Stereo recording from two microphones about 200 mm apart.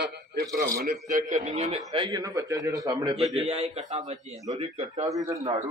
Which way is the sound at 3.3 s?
30° right (ahead or behind).